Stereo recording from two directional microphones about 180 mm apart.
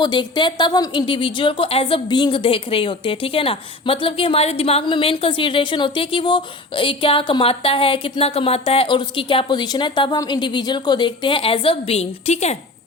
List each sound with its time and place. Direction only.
0.0 s a woman's voice: 25° left (ahead or behind)